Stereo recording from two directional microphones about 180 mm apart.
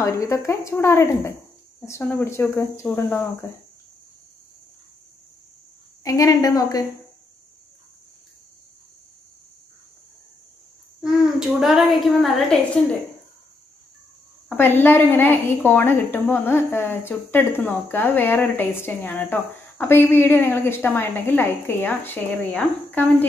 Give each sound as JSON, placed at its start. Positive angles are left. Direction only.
{"t": 0.0, "sound": "a woman's voice", "side_deg": 15}
{"t": 6.0, "sound": "a woman's voice", "side_deg": 20}
{"t": 11.0, "sound": "a woman's voice", "side_deg": -5}
{"t": 14.5, "sound": "a woman's voice", "side_deg": 10}